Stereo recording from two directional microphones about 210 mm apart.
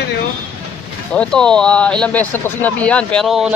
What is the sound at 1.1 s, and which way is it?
Speech, 5° left (ahead or behind).